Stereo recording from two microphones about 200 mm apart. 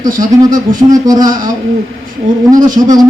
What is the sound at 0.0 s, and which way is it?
A man's voice, 20° right (ahead or behind).